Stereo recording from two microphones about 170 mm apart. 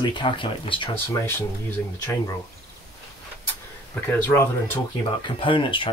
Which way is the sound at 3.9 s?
15° left (ahead or behind).